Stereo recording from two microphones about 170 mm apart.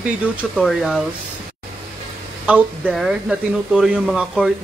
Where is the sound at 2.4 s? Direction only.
5° right (ahead or behind).